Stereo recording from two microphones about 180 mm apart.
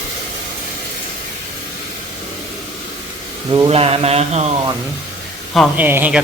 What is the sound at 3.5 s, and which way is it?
Speech, 30° right (ahead or behind).